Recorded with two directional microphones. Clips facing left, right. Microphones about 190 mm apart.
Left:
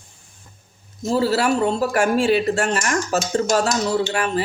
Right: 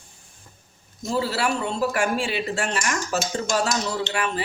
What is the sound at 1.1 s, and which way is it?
Speech, 40° left (ahead or behind).